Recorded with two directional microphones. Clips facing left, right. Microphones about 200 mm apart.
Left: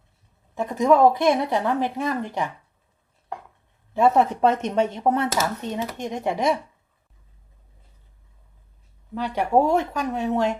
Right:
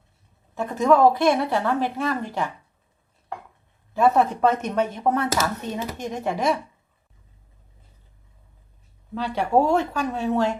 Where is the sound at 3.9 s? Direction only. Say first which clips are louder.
Left 1 dB; 25° left (ahead or behind).